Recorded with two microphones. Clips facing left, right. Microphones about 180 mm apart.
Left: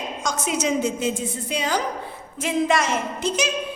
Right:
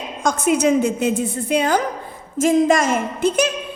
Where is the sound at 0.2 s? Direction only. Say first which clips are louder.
Right 8 dB; 55° right (ahead or behind).